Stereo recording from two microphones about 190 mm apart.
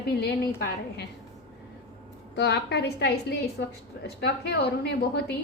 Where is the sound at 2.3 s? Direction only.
60° left (ahead or behind).